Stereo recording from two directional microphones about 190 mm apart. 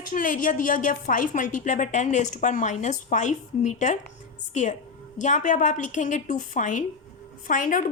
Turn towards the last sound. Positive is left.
turn(degrees=45)  # may be behind; listen again after turning